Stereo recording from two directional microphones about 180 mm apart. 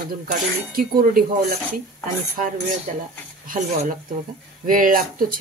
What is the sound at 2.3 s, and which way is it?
Speech, 50° right (ahead or behind).